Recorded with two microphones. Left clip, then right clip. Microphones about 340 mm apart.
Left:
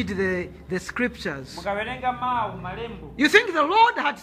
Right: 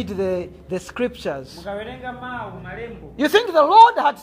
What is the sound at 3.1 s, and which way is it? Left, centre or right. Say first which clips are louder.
A woman's voice: right 2 dB; centre.